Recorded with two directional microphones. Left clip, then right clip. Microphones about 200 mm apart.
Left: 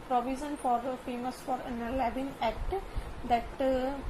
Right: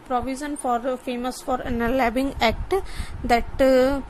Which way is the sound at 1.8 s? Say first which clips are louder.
Right 12 dB; 40° right (ahead or behind).